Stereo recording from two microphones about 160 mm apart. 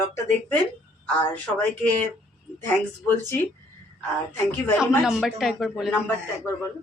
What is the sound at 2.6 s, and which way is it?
Speech, 15° left (ahead or behind).